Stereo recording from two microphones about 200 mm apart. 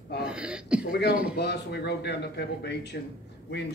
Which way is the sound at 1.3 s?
55° left (ahead or behind).